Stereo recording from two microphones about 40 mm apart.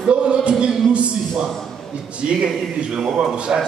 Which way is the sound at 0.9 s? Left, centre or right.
Right.